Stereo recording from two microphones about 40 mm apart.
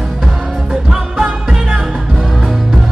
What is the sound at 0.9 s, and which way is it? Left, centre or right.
Music, centre.